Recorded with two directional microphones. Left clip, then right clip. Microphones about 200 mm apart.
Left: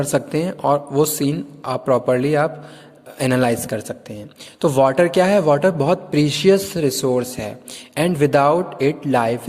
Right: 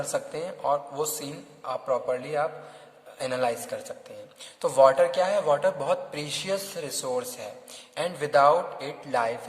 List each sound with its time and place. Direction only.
0.1 s a man's voice: 40° left (ahead or behind)